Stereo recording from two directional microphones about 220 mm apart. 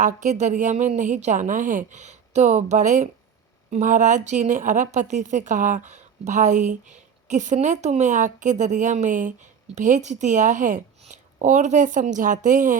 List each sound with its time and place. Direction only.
0.0 s a woman's voice: 35° right (ahead or behind)